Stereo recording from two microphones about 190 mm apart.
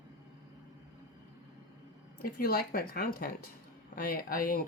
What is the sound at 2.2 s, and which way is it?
Speech, 50° left (ahead or behind).